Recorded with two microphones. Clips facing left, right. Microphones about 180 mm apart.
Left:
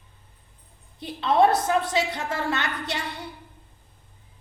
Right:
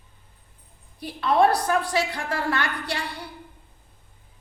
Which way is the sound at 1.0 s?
20° left (ahead or behind).